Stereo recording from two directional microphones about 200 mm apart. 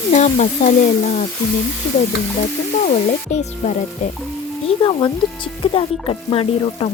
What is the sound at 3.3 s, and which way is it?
Speech, 35° left (ahead or behind).